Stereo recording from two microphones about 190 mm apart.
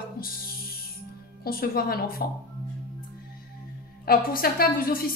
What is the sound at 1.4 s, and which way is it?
Speech, 55° left (ahead or behind).